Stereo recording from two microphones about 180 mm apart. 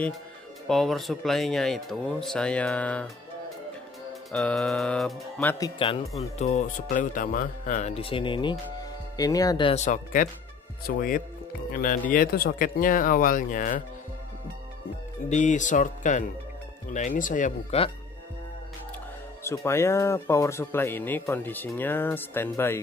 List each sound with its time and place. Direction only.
0.7 s speech: centre (ahead or behind)
4.3 s speech: centre (ahead or behind)
5.4 s speech: 15° left (ahead or behind)
5.8 s speech: 30° left (ahead or behind)
9.8 s speech: 50° left (ahead or behind)
15.2 s speech: 40° left (ahead or behind)
19.4 s speech: 15° left (ahead or behind)